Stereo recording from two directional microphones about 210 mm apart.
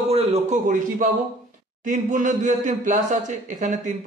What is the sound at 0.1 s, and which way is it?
A man's voice, 30° right (ahead or behind).